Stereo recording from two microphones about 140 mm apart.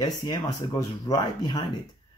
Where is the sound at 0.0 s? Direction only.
30° left (ahead or behind).